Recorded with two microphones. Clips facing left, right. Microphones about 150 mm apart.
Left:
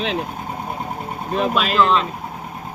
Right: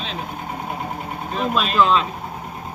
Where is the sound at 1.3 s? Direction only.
70° left (ahead or behind).